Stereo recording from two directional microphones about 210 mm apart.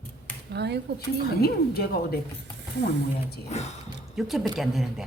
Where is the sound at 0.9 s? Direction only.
50° left (ahead or behind).